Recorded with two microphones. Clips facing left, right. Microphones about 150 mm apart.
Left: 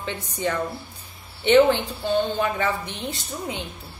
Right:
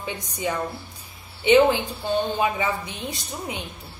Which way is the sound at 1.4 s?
10° right (ahead or behind).